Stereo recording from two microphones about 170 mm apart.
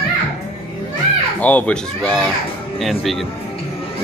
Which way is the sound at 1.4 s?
10° left (ahead or behind).